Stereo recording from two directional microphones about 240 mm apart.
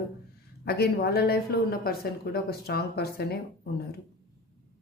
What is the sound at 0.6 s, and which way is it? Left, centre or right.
A woman's voice, left.